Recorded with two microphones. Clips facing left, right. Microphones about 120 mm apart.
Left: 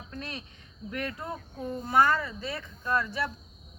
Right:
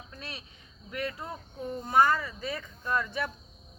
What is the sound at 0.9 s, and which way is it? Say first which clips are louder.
A woman's voice: left 1 dB; 15° right (ahead or behind).